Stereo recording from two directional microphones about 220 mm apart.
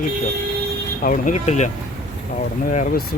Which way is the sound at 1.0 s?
35° left (ahead or behind).